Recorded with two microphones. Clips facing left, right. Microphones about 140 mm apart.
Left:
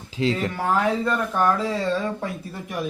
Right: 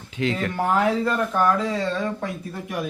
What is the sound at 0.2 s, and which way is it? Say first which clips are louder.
Speech: left 1 dB; 30° left (ahead or behind).